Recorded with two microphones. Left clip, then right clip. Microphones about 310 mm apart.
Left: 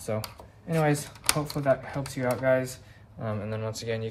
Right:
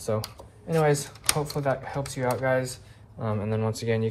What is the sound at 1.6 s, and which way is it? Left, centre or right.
Speech, centre.